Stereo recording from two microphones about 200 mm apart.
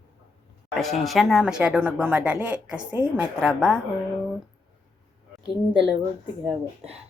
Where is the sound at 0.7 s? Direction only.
Centre (ahead or behind).